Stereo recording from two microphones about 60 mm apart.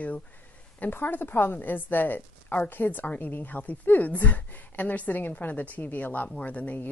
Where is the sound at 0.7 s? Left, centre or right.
Left.